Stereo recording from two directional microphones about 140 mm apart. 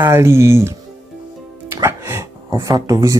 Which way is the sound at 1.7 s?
20° right (ahead or behind).